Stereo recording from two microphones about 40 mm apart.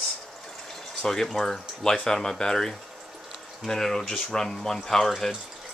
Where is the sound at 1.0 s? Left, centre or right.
Centre.